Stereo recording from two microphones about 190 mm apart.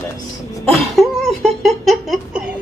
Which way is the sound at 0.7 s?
Centre (ahead or behind).